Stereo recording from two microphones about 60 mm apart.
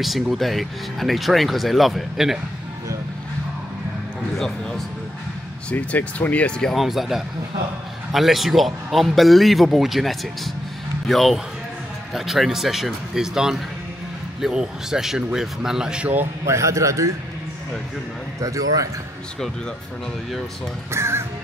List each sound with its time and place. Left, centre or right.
0.0 s speech: centre
4.4 s speech: centre
5.7 s speech: left
6.7 s speech: centre
16.4 s a man's voice: right
18.4 s a man's voice: right
20.9 s speech: right